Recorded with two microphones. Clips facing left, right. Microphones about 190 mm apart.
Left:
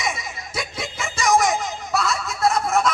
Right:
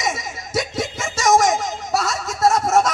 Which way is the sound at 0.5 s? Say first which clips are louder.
Right 7 dB; 40° right (ahead or behind).